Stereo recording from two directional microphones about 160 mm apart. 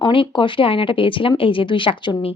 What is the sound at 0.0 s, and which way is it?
Speech, 30° left (ahead or behind).